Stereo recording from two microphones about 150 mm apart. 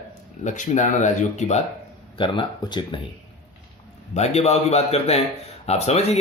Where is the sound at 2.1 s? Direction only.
35° left (ahead or behind).